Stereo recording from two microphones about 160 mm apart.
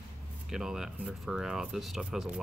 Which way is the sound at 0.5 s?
Centre (ahead or behind).